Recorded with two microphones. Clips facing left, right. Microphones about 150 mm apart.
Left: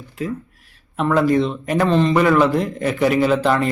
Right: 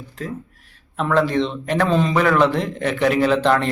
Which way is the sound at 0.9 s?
5° left (ahead or behind).